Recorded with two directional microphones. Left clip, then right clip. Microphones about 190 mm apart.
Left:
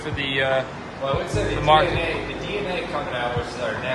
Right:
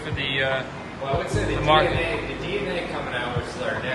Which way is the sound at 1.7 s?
20° left (ahead or behind).